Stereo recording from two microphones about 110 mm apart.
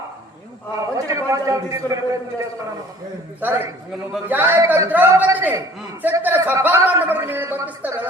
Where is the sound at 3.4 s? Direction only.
20° right (ahead or behind).